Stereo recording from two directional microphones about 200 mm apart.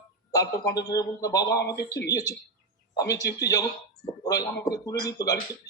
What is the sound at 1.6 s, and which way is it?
Speech, 55° left (ahead or behind).